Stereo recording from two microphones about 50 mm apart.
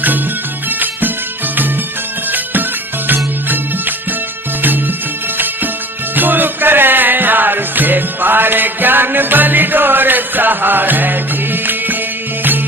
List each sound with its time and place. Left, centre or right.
2.3 s music: right
6.1 s music: right